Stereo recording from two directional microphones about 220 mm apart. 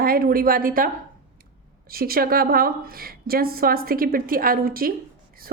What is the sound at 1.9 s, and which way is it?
A woman's voice, 40° right (ahead or behind).